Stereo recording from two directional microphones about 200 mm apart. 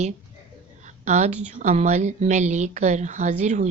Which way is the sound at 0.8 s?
35° right (ahead or behind).